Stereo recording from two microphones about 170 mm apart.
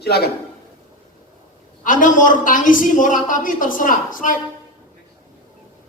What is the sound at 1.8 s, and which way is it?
A woman's voice, 50° left (ahead or behind).